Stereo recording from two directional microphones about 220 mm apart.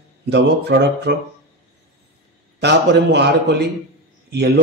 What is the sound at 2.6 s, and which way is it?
A man's voice, 50° right (ahead or behind).